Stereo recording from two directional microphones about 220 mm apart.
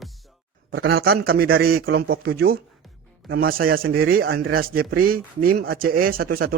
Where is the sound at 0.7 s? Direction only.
45° right (ahead or behind).